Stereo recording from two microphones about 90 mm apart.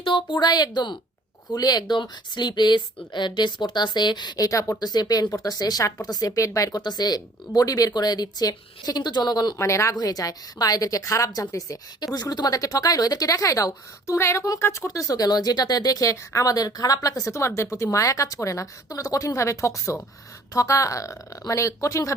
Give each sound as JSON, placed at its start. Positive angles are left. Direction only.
{"t": 0.0, "sound": "a woman's voice", "side_deg": 65}
{"t": 9.6, "sound": "speech", "side_deg": 35}
{"t": 9.9, "sound": "a woman's voice", "side_deg": 45}